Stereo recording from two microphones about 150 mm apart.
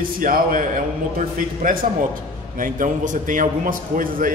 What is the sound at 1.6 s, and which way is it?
A man's voice, 65° right (ahead or behind).